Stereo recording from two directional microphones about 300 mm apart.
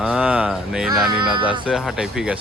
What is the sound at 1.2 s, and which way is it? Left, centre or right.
Speech, centre.